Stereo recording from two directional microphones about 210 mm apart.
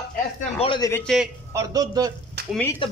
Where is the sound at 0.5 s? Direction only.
25° left (ahead or behind).